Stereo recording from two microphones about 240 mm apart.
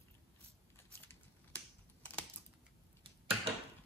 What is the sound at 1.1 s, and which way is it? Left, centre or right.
Typing, centre.